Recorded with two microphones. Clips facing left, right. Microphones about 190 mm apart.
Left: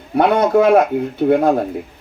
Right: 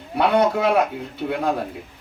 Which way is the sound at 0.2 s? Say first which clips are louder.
Left 5 dB; 50° left (ahead or behind).